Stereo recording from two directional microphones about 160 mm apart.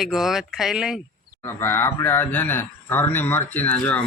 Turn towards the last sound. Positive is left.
turn(degrees=5)  # may be behind; listen again after turning